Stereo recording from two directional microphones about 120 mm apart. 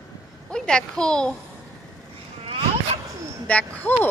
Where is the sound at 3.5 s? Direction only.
10° left (ahead or behind).